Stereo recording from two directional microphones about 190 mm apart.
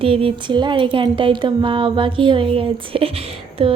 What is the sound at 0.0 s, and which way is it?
A woman's voice, 30° right (ahead or behind).